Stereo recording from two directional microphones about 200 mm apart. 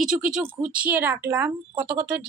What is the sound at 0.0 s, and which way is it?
Speech, 5° right (ahead or behind).